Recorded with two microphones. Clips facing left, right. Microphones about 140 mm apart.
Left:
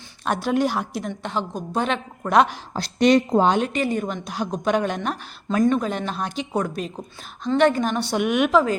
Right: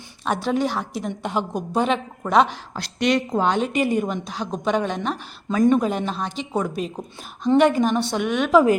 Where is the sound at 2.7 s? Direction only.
35° left (ahead or behind).